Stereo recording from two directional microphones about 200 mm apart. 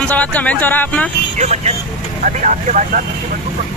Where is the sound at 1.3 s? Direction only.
35° right (ahead or behind).